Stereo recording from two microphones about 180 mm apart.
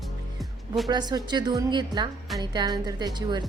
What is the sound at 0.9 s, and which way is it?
Speech, 25° right (ahead or behind).